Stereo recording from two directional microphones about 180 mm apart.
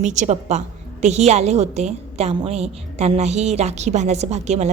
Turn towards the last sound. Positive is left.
turn(degrees=-40)  # may be behind; listen again after turning